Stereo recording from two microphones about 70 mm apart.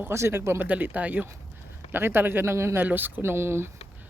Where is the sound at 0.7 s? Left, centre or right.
Right.